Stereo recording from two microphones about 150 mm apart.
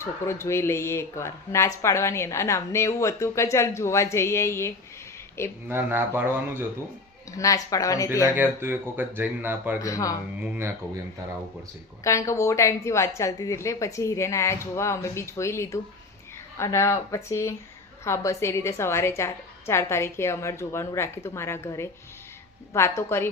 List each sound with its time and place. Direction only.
0.0 s speech: 20° left (ahead or behind)
5.6 s speech: 15° right (ahead or behind)
7.3 s speech: 25° left (ahead or behind)
8.4 s speech: 15° right (ahead or behind)
9.7 s speech: 20° left (ahead or behind)
10.4 s speech: 10° right (ahead or behind)
12.0 s a woman's voice: 20° left (ahead or behind)